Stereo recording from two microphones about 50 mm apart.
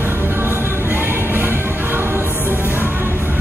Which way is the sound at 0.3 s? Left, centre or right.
Right.